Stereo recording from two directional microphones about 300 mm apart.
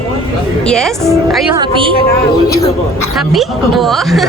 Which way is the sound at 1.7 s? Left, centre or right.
Centre.